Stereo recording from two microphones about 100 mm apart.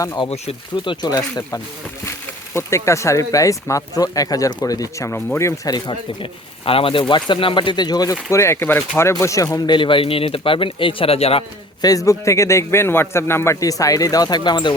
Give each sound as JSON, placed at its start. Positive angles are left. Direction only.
{"t": 0.9, "sound": "speech", "side_deg": 40}
{"t": 2.0, "sound": "speech", "side_deg": 30}
{"t": 5.7, "sound": "speech", "side_deg": 45}
{"t": 6.7, "sound": "speech", "side_deg": 65}
{"t": 7.1, "sound": "speech", "side_deg": 55}
{"t": 8.3, "sound": "speech", "side_deg": 30}
{"t": 9.6, "sound": "speech", "side_deg": 55}
{"t": 11.8, "sound": "speech", "side_deg": 35}